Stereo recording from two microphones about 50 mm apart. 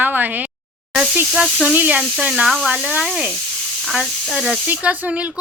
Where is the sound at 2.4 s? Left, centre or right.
Centre.